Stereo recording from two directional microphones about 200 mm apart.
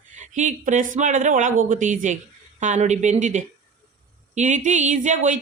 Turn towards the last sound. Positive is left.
turn(degrees=-40)  # may be behind; listen again after turning